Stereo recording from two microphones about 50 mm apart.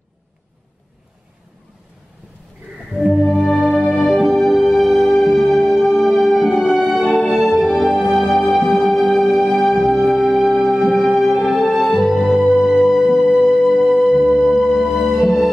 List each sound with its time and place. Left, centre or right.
3.2 s music: centre
5.1 s music: left
5.5 s music: centre